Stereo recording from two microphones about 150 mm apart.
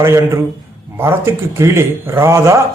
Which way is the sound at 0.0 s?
15° right (ahead or behind).